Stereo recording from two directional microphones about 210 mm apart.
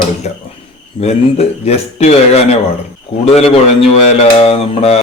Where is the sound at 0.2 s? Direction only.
35° left (ahead or behind).